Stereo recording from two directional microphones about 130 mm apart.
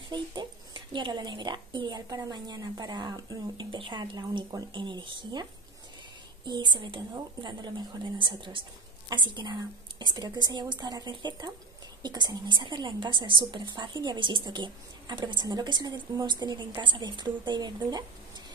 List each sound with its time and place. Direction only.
0.1 s a woman's voice: 35° right (ahead or behind)